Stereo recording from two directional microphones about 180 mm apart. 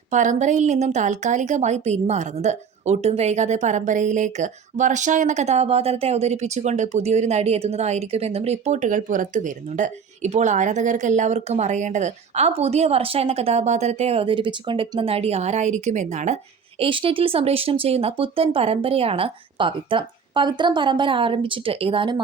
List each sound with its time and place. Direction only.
0.1 s a woman's voice: 45° right (ahead or behind)
16.8 s a woman's voice: 30° right (ahead or behind)